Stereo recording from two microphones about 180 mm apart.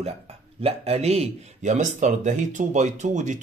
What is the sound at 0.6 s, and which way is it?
Speech, 35° right (ahead or behind).